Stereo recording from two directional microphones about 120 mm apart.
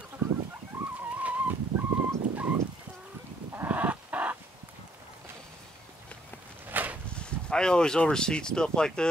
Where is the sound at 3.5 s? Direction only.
15° right (ahead or behind).